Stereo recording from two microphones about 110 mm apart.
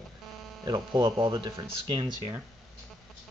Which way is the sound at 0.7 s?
40° right (ahead or behind).